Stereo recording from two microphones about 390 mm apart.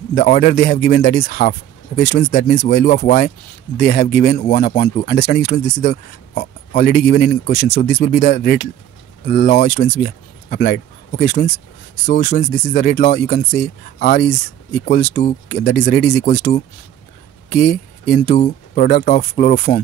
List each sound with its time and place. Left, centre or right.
0.1 s speech: left